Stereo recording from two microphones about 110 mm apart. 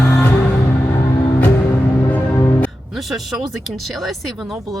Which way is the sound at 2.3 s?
30° left (ahead or behind).